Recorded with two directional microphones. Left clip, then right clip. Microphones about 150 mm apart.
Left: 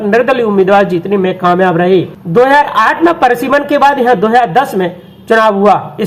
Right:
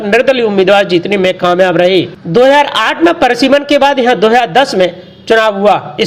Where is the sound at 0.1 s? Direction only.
30° right (ahead or behind).